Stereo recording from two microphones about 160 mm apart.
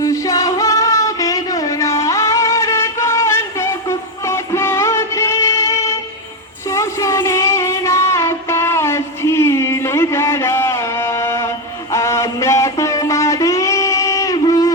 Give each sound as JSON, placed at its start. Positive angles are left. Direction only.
{"t": 0.0, "sound": "music", "side_deg": 20}
{"t": 6.7, "sound": "child singing", "side_deg": 20}